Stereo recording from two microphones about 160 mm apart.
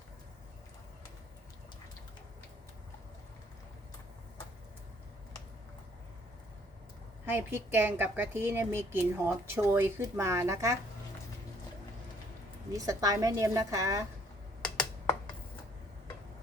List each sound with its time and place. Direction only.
7.3 s a woman's voice: 10° right (ahead or behind)
12.7 s a woman's voice: 20° right (ahead or behind)